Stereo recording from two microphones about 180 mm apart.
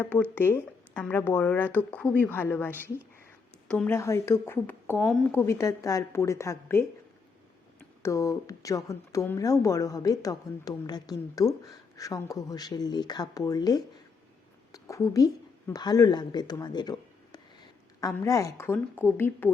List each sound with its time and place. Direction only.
0.0 s a woman's voice: 10° left (ahead or behind)